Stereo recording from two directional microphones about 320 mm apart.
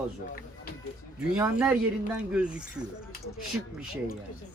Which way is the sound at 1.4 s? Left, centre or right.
Centre.